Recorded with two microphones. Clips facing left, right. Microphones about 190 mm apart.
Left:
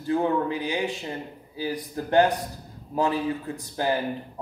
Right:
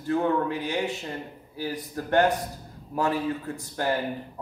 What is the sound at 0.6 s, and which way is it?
A man's voice, 15° left (ahead or behind).